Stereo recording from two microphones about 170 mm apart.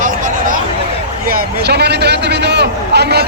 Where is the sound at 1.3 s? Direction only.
65° right (ahead or behind).